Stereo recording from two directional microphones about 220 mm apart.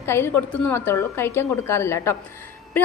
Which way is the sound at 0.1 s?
10° left (ahead or behind).